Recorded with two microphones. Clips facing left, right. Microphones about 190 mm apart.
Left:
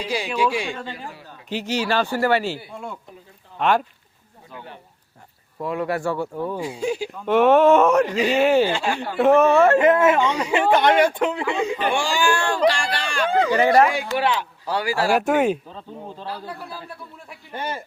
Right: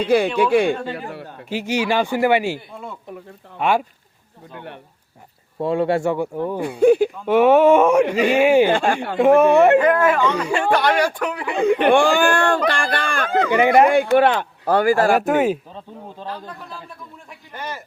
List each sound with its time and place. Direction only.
0.0 s speech: 55° right (ahead or behind)
1.5 s speech: 10° right (ahead or behind)
2.6 s speech: centre (ahead or behind)
5.5 s speech: 30° right (ahead or behind)
6.6 s speech: 60° right (ahead or behind)
7.3 s speech: 10° right (ahead or behind)
8.6 s speech: 55° right (ahead or behind)
9.1 s speech: 10° right (ahead or behind)
9.7 s speech: 25° left (ahead or behind)
11.5 s speech: 60° right (ahead or behind)
15.2 s speech: centre (ahead or behind)
16.2 s a man's voice: 10° left (ahead or behind)
17.5 s speech: 30° left (ahead or behind)